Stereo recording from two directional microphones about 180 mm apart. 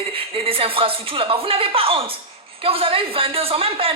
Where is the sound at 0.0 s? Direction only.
30° right (ahead or behind).